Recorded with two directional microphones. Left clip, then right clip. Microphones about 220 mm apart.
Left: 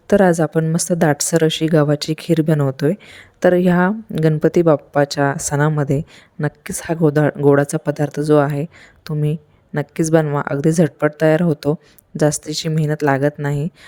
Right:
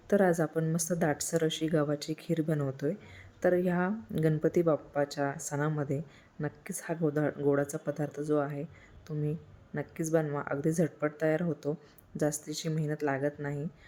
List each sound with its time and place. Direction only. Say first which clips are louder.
0.1 s speech: left 13 dB; 40° left (ahead or behind)